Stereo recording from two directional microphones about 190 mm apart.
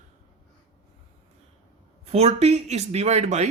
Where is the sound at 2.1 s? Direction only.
35° right (ahead or behind).